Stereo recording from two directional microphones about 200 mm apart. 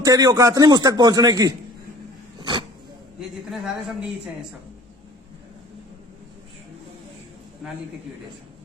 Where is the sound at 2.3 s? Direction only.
25° right (ahead or behind).